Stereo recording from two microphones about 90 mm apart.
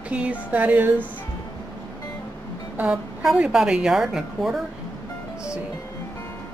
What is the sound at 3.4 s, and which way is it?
Speech, 10° right (ahead or behind).